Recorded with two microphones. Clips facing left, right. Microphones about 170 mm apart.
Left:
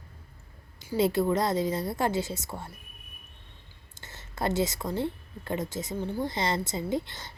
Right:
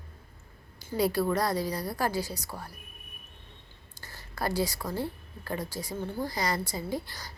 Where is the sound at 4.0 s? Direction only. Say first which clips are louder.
Left 2 dB; 25° left (ahead or behind).